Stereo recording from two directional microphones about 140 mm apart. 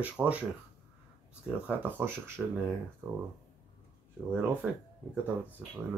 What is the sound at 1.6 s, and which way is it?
Speech, 15° right (ahead or behind).